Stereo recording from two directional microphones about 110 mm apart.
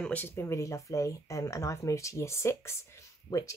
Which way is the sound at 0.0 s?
15° left (ahead or behind).